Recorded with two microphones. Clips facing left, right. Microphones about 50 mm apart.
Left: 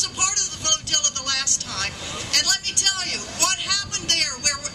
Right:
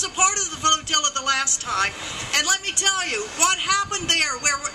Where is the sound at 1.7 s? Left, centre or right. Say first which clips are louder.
Right 7 dB; right.